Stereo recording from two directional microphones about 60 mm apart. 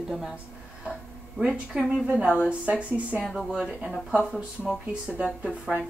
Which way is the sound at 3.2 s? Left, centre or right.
Centre.